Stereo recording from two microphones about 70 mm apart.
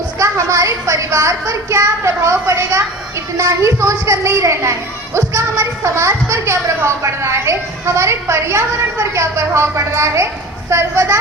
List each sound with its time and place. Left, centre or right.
0.2 s a woman's voice: right